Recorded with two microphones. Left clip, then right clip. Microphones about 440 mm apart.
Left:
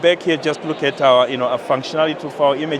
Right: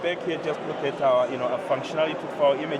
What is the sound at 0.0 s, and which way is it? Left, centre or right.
Speech, left.